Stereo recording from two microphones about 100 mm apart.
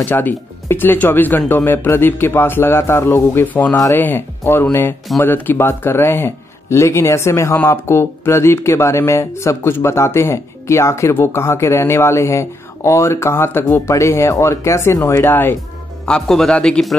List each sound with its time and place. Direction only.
0.0 s speech: 20° left (ahead or behind)
16.1 s speech: 5° left (ahead or behind)